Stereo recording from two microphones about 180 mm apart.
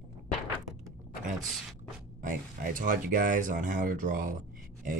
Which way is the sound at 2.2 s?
45° right (ahead or behind).